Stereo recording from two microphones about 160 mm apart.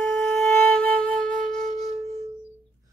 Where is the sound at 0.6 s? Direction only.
5° left (ahead or behind).